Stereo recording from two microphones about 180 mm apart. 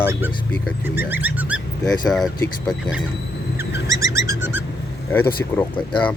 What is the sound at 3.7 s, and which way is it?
Bird, 15° right (ahead or behind).